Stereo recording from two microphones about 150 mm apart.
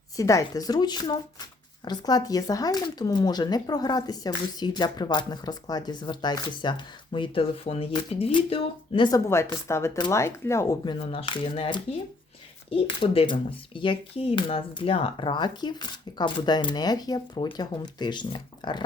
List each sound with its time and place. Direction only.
0.2 s speech: 20° left (ahead or behind)
10.8 s speech: 40° left (ahead or behind)